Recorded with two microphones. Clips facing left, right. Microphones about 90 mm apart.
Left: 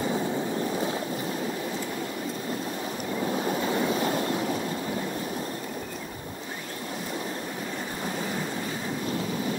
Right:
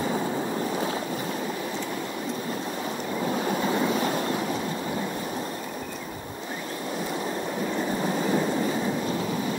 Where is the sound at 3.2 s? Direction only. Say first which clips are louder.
Right 1 dB; 25° right (ahead or behind).